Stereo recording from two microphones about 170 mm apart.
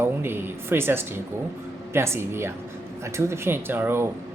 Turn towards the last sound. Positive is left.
turn(degrees=-15)  # may be behind; listen again after turning